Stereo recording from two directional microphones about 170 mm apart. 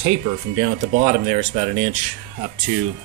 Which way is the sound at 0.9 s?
45° right (ahead or behind).